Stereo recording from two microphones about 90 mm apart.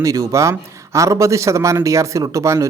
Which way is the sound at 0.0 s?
40° right (ahead or behind).